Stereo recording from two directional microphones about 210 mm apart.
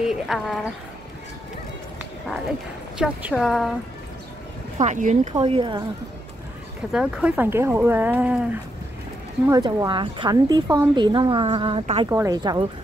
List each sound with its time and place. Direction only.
0.1 s a woman's voice: centre (ahead or behind)
3.0 s a woman's voice: 5° right (ahead or behind)
4.7 s speech: 35° right (ahead or behind)
5.4 s speech: 25° right (ahead or behind)
6.9 s speech: 5° right (ahead or behind)
9.5 s speech: 20° right (ahead or behind)
12.1 s speech: 15° right (ahead or behind)